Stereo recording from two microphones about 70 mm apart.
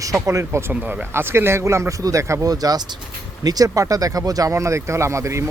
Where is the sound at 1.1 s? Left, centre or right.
Right.